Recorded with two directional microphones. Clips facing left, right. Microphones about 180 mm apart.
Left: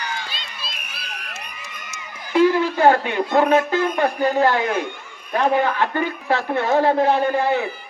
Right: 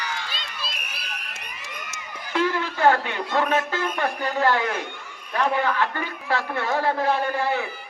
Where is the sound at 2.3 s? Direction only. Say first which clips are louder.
Left 8 dB; 10° left (ahead or behind).